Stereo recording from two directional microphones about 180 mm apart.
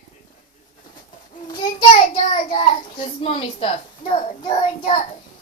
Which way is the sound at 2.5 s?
30° left (ahead or behind).